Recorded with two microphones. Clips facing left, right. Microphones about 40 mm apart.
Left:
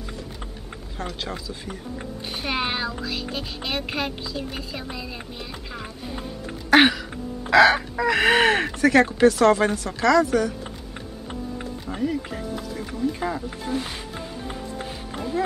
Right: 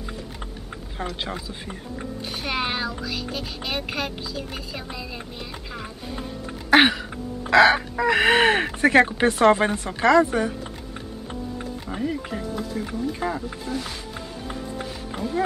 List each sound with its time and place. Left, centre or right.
1.2 s speech: right
2.3 s speech: centre
6.7 s chicken: centre
8.7 s speech: right
11.9 s speech: centre
13.7 s speech: left